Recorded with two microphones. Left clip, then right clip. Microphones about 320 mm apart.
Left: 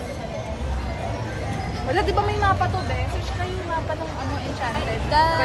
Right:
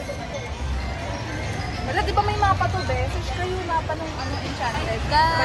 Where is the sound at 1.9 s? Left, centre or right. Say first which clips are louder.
Left 1 dB; centre.